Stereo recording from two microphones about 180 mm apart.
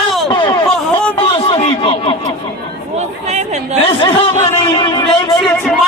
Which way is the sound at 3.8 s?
30° left (ahead or behind).